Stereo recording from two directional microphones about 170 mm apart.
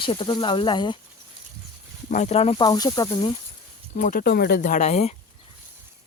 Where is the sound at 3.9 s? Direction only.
55° left (ahead or behind).